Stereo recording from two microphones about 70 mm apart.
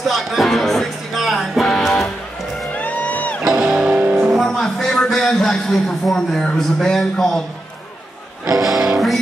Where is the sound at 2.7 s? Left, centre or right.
Centre.